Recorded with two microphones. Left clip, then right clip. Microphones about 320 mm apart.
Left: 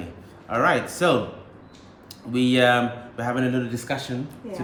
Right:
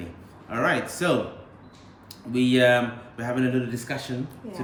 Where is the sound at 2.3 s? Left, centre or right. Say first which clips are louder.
Left 1 dB; centre.